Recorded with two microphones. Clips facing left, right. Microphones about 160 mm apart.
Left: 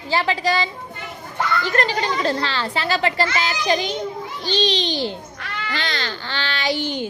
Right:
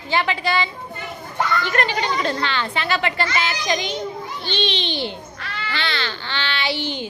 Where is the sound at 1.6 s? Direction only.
35° left (ahead or behind).